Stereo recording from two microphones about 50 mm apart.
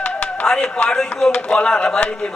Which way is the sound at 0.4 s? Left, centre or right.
Centre.